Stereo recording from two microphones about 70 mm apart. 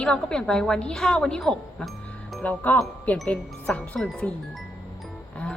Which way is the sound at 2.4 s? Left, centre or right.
Left.